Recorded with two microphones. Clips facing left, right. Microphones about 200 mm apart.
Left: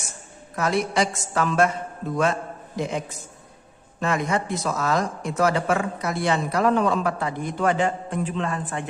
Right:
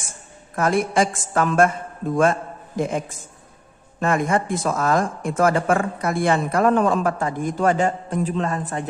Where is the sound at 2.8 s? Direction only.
50° right (ahead or behind).